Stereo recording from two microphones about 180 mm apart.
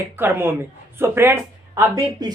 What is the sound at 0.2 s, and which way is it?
Speech, 10° right (ahead or behind).